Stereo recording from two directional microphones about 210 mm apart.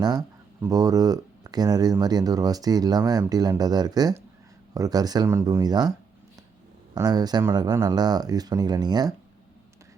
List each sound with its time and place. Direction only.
0.0 s speech: 20° right (ahead or behind)
6.9 s speech: 20° right (ahead or behind)